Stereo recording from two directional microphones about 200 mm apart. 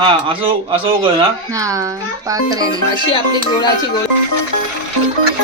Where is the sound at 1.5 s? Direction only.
15° right (ahead or behind).